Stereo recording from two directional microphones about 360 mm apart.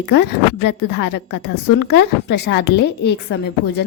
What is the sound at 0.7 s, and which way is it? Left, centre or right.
A woman's voice, left.